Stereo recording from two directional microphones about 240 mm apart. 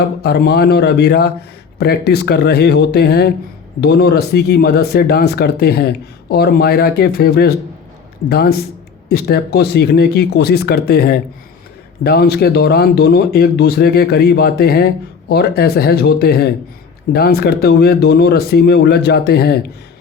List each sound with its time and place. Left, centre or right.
0.2 s speech: left